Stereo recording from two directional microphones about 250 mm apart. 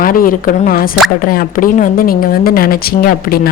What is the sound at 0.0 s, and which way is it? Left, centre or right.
Speech, left.